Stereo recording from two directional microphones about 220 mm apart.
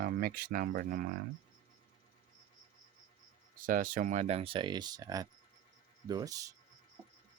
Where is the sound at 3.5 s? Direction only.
40° right (ahead or behind); by 6.5 s 15° right (ahead or behind).